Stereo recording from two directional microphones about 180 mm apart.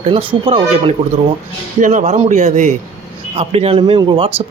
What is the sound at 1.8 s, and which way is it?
Speech, 45° right (ahead or behind).